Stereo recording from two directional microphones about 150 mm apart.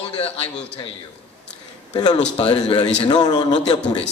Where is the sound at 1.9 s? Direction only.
30° left (ahead or behind).